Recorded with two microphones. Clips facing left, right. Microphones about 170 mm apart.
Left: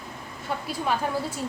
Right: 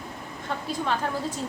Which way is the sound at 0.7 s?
10° left (ahead or behind).